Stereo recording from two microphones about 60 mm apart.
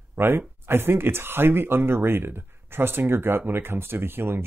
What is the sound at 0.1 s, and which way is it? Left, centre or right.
Speech, right.